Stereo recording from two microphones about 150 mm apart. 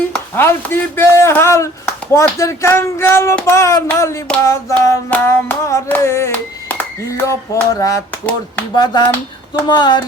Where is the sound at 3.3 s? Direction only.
15° left (ahead or behind).